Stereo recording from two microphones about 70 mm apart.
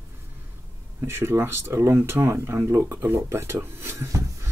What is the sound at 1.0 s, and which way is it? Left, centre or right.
Speech, right.